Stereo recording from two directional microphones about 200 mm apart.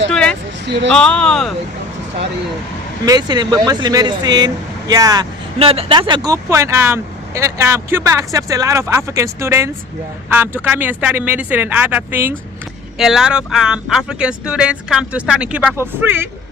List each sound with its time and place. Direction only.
0.1 s vehicle: 5° left (ahead or behind)
0.9 s speech: 5° left (ahead or behind)
3.1 s speech: 20° right (ahead or behind)